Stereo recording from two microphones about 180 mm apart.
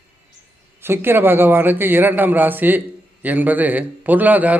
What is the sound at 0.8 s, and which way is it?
A man's voice, 10° right (ahead or behind).